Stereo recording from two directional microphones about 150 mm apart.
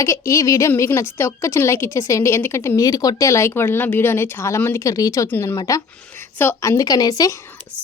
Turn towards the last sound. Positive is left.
turn(degrees=25)  # may be behind; listen again after turning